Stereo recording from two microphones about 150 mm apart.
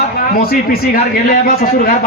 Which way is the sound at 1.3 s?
65° left (ahead or behind).